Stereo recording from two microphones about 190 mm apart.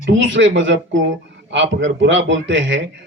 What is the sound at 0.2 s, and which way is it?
Speech, 75° right (ahead or behind).